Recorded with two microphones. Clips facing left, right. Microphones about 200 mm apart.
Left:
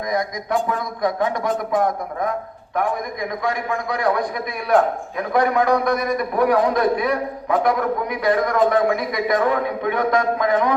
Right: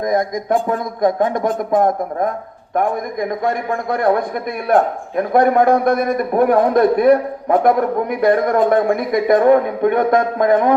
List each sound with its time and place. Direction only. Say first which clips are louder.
0.0 s a man's voice: right 6 dB; 50° right (ahead or behind)